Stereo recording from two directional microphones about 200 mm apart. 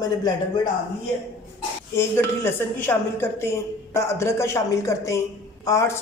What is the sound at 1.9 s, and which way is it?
Speech, 10° left (ahead or behind).